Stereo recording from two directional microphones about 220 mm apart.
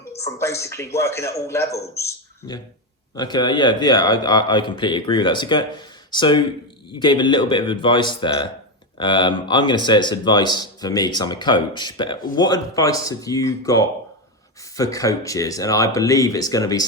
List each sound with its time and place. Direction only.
0.2 s a man's voice: 15° left (ahead or behind)